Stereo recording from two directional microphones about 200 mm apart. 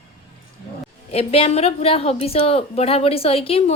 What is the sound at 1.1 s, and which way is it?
A woman's voice, 30° left (ahead or behind).